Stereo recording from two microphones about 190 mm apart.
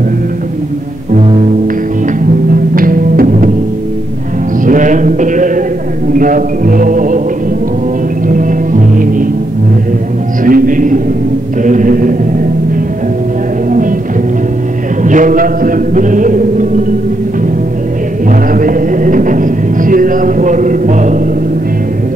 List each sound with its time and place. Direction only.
2.7 s music: 45° right (ahead or behind)
4.6 s music: 40° right (ahead or behind)
6.1 s mantra: 45° right (ahead or behind)
8.3 s music: 45° right (ahead or behind)
10.4 s a man's voice: 45° right (ahead or behind)
11.6 s mantra: 45° right (ahead or behind)
15.0 s mantra: 45° right (ahead or behind)
18.5 s a sound: 45° right (ahead or behind)